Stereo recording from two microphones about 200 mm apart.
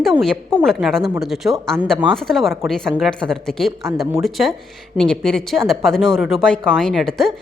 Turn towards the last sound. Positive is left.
turn(degrees=0)  # may be behind; listen again after turning